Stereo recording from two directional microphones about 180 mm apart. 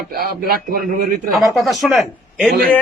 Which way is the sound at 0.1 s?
60° right (ahead or behind).